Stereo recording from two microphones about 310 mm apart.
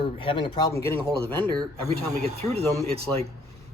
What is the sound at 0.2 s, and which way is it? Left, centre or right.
Speech, centre.